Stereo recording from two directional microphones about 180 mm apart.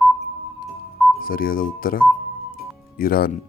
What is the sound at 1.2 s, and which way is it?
Speech, 55° left (ahead or behind).